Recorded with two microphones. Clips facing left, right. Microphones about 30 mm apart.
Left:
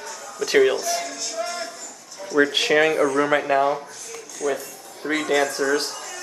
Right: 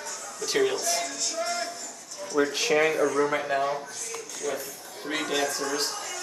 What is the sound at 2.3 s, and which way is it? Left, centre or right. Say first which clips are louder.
Speech: left 6 dB; left.